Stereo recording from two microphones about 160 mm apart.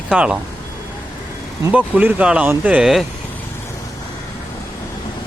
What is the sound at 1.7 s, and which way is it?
Speech, 10° right (ahead or behind).